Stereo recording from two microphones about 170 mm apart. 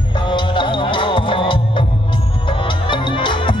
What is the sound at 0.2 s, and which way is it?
Music, 30° left (ahead or behind).